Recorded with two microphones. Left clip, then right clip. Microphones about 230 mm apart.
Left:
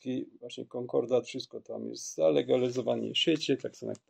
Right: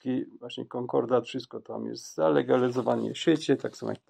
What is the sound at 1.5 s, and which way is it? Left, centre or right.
Speech, right.